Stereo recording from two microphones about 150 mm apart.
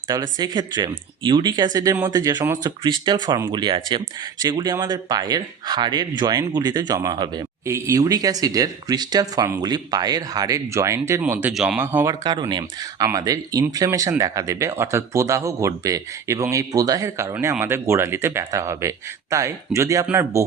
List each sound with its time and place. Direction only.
0.1 s speech: 25° right (ahead or behind)
11.5 s speech: 5° right (ahead or behind)
11.8 s speech: 15° right (ahead or behind)
12.2 s speech: 30° right (ahead or behind)
17.3 s speech: 15° right (ahead or behind)